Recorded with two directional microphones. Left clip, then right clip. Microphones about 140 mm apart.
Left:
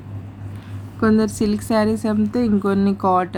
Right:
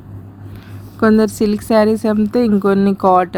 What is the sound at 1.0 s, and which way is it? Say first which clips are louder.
A woman's voice: right 5 dB; 60° right (ahead or behind).